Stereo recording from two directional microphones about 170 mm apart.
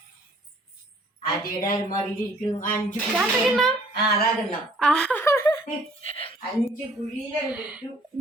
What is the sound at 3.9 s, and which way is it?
Speech, 65° left (ahead or behind).